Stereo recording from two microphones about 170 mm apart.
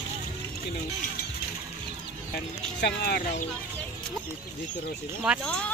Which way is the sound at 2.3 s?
70° left (ahead or behind).